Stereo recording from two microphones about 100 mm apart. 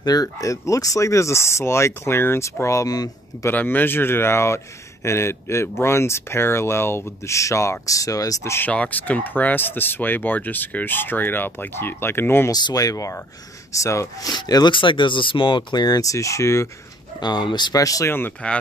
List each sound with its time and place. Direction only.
0.0 s speech: 40° left (ahead or behind)
3.4 s speech: 20° left (ahead or behind); by 8.5 s 35° left (ahead or behind)
8.5 s speech: 15° left (ahead or behind)
12.4 s speech: 40° left (ahead or behind)
14.3 s speech: 45° left (ahead or behind); by 16.6 s 30° left (ahead or behind)
17.2 s speech: 45° left (ahead or behind)
17.7 s speech: 35° left (ahead or behind)
18.1 s speech: 15° left (ahead or behind)